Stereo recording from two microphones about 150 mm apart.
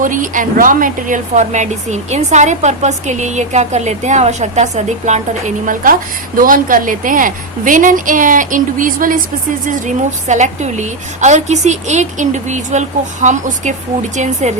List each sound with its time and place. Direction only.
0.0 s a woman's voice: 60° right (ahead or behind)